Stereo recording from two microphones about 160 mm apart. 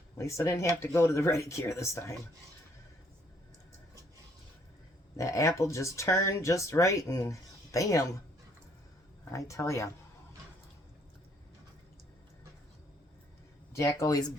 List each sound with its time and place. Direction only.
0.2 s speech: 20° left (ahead or behind)
5.1 s speech: 20° left (ahead or behind)
9.3 s speech: 20° left (ahead or behind)
13.7 s speech: 20° left (ahead or behind)